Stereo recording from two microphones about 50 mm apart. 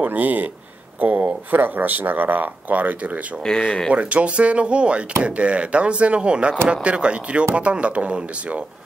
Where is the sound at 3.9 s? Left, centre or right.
Right.